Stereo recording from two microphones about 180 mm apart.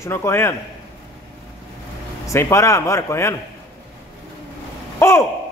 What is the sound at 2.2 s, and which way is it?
A man's voice, 15° left (ahead or behind).